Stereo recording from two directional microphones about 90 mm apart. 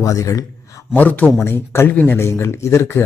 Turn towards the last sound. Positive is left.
turn(degrees=30)  # may be behind; listen again after turning